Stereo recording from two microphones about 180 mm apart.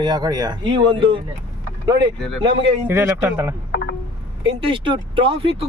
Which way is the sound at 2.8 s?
10° right (ahead or behind).